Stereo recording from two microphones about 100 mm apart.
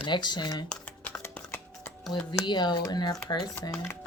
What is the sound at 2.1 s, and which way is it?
Speech, 45° left (ahead or behind).